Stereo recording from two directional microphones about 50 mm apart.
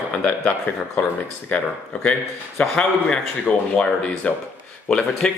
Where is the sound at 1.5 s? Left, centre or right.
Centre.